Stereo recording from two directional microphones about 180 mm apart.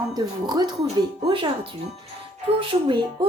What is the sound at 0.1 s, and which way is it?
Speech, 20° right (ahead or behind).